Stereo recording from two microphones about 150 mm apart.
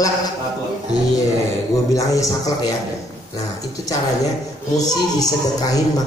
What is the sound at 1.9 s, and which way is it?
A woman's voice, 20° left (ahead or behind).